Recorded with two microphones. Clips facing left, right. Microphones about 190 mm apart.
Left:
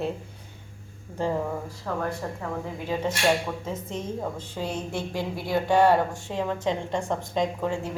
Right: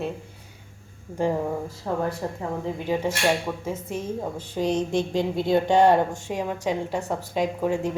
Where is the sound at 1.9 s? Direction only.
25° right (ahead or behind).